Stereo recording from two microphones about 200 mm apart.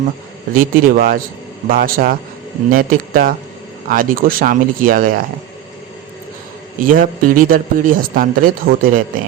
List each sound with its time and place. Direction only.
0.5 s a man's voice: 45° right (ahead or behind)
6.7 s a man's voice: 45° right (ahead or behind)